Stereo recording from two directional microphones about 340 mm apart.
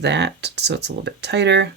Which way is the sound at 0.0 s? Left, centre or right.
Right.